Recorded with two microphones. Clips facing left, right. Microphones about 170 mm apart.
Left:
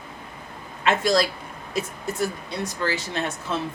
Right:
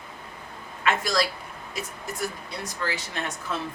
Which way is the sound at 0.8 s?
30° left (ahead or behind).